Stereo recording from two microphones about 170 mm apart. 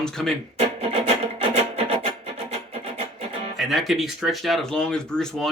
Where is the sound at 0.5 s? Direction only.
35° right (ahead or behind).